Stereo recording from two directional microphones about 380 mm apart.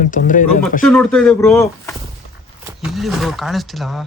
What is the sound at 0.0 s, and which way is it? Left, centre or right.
Speech, left.